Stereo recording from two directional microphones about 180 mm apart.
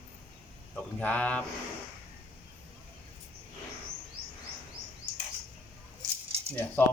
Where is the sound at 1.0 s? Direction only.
10° left (ahead or behind).